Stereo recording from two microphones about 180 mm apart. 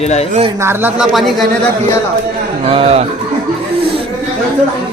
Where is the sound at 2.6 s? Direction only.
30° right (ahead or behind).